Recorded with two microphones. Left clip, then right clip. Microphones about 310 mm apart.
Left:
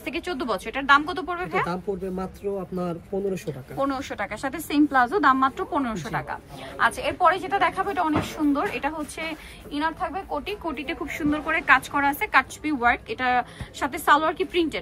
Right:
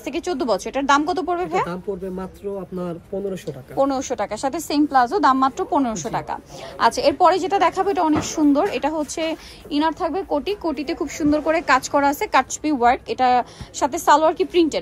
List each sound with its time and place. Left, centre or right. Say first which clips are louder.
0.0 s a woman's voice: right 5 dB; centre
1.7 s speech: right 1 dB; centre
3.7 s a woman's voice: right 7 dB; centre